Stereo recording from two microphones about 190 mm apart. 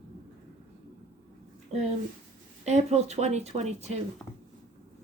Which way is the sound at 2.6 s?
35° right (ahead or behind).